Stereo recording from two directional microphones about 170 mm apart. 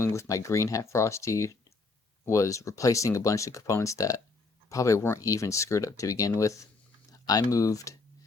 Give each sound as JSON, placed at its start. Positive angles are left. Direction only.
{"t": 0.0, "sound": "speech", "side_deg": 15}
{"t": 7.1, "sound": "a sound", "side_deg": 20}
{"t": 7.5, "sound": "speech", "side_deg": 20}